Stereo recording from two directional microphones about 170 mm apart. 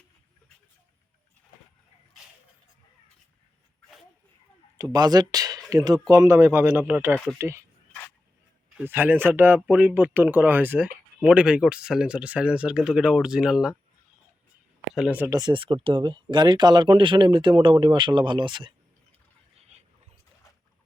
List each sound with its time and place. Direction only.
4.8 s speech: 25° right (ahead or behind)
8.8 s speech: 10° right (ahead or behind)
14.9 s speech: 5° right (ahead or behind)
15.3 s speech: 25° right (ahead or behind)
19.5 s a sound: 40° right (ahead or behind)